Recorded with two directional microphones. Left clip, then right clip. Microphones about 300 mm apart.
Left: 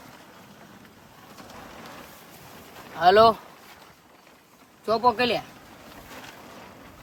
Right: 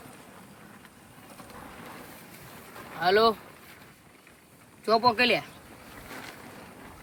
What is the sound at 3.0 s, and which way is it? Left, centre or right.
Speech, centre.